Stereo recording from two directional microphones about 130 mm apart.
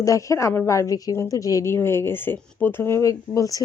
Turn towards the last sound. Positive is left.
turn(degrees=25)  # may be behind; listen again after turning